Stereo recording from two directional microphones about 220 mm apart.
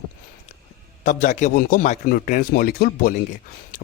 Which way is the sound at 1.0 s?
35° left (ahead or behind).